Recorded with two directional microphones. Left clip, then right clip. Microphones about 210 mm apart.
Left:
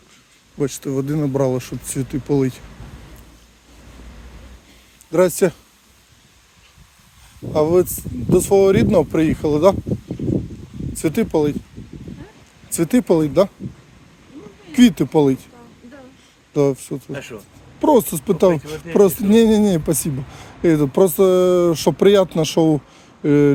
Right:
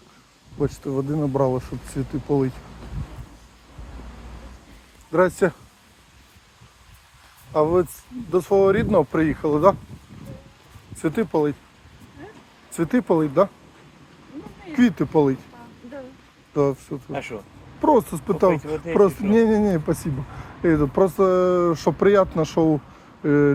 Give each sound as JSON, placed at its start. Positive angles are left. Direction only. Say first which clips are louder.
{"t": 0.9, "sound": "speech", "louder": "left 3 dB", "side_deg": 65}
{"t": 1.5, "sound": "speech", "louder": "left 3 dB", "side_deg": 45}
{"t": 5.1, "sound": "speech", "louder": "left 3 dB", "side_deg": 55}
{"t": 7.5, "sound": "speech", "louder": "left 4 dB", "side_deg": 60}
{"t": 11.0, "sound": "speech", "louder": "left 3 dB", "side_deg": 60}
{"t": 12.7, "sound": "speech", "louder": "left 4 dB", "side_deg": 55}
{"t": 14.7, "sound": "speech", "louder": "left 5 dB", "side_deg": 50}
{"t": 16.6, "sound": "speech", "louder": "left 4 dB", "side_deg": 50}
{"t": 17.1, "sound": "speech", "louder": "right 1 dB", "side_deg": 20}
{"t": 17.7, "sound": "speech", "louder": "left 3 dB", "side_deg": 50}